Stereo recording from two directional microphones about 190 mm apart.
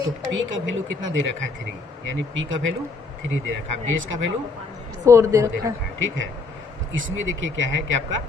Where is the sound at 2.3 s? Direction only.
90° right.